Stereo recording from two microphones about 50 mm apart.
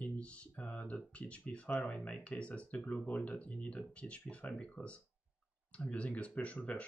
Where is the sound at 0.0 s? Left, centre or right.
Left.